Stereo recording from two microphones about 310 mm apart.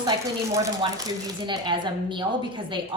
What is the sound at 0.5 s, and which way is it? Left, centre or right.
A woman's voice, centre.